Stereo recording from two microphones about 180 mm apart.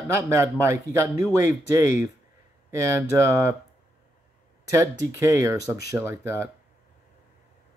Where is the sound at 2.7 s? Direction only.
15° right (ahead or behind).